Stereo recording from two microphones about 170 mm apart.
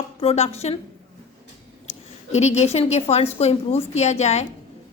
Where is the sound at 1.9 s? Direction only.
40° left (ahead or behind).